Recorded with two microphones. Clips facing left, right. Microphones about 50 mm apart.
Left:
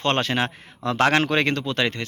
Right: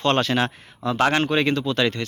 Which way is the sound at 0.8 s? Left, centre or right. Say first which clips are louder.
Left 1 dB; left.